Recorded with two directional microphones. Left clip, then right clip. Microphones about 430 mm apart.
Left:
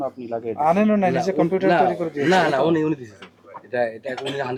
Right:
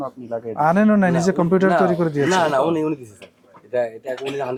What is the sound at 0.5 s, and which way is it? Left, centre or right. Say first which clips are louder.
Speech: right 2 dB; right.